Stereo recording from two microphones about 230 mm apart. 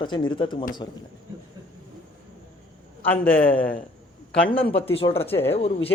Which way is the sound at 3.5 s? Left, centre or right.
Left.